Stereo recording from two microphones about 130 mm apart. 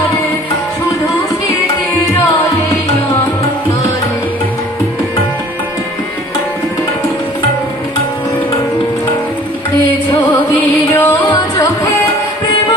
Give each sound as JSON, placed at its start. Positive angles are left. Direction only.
{"t": 10.9, "sound": "music", "side_deg": 20}